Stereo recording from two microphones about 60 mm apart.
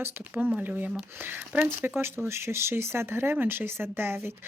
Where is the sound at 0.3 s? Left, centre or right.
Right.